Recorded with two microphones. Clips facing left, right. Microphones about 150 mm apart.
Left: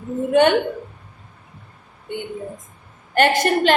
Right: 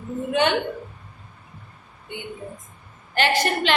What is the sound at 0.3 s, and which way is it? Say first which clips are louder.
Speech: left 7 dB; 50° left (ahead or behind).